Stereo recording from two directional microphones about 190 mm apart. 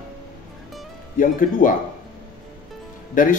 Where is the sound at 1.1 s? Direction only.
45° left (ahead or behind).